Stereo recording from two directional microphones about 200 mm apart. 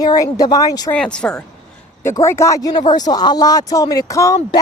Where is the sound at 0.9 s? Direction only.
5° left (ahead or behind).